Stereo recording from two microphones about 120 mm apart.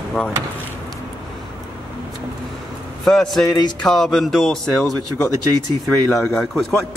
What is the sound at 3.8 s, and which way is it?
A man's voice, centre (ahead or behind).